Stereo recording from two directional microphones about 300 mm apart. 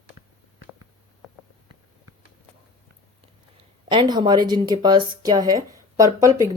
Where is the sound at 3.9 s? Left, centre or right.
Centre.